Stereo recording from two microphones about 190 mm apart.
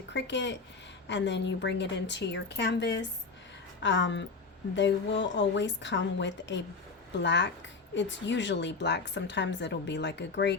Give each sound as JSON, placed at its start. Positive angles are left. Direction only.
{"t": 0.1, "sound": "speech", "side_deg": 70}